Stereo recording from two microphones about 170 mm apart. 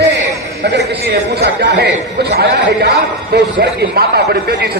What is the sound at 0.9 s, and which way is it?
A man's voice, 80° right.